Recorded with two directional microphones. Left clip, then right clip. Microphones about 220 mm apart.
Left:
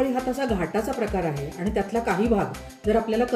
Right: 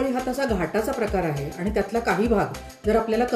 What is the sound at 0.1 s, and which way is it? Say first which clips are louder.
Speech: right 1 dB; 10° right (ahead or behind).